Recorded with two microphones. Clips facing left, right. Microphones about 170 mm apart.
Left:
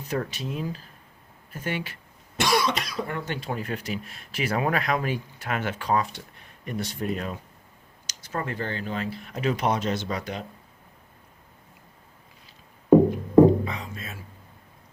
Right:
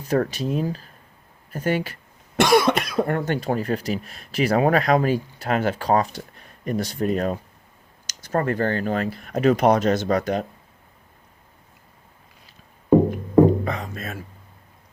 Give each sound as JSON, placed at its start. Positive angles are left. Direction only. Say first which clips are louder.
{"t": 0.1, "sound": "speech", "louder": "right 8 dB", "side_deg": -40}
{"t": 2.3, "sound": "speech", "louder": "right 7 dB", "side_deg": -55}
{"t": 13.7, "sound": "a sound", "louder": "right 6 dB", "side_deg": -50}